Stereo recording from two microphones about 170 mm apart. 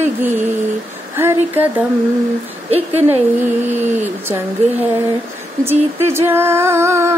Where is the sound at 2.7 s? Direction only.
35° right (ahead or behind).